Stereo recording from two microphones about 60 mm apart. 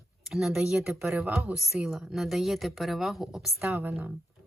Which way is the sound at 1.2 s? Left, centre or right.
Right.